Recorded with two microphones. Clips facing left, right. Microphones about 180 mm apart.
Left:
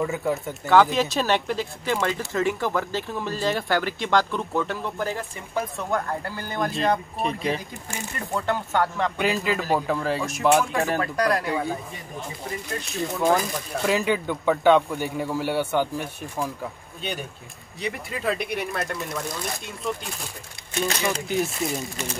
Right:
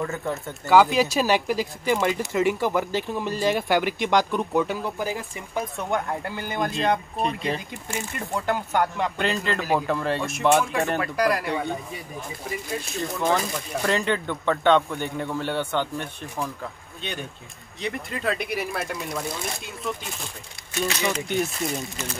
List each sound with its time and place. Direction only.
0.2 s speech: centre (ahead or behind); by 6.7 s 20° right (ahead or behind)
6.7 s speech: centre (ahead or behind)
8.9 s a man's voice: centre (ahead or behind)
21.3 s speech: centre (ahead or behind)